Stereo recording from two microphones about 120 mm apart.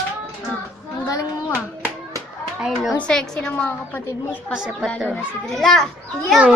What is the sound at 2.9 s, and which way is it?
A woman's voice, 5° left (ahead or behind).